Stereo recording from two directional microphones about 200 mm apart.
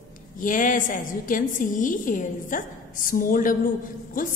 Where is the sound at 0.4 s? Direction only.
40° left (ahead or behind).